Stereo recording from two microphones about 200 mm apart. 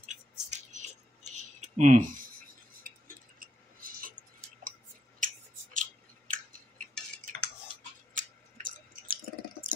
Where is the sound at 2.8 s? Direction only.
45° right (ahead or behind).